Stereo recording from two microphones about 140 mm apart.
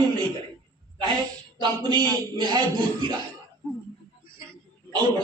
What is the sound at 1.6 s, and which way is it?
A man's voice, 35° right (ahead or behind).